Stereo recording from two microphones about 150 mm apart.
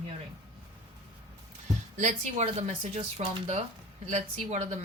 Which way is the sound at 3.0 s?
40° right (ahead or behind).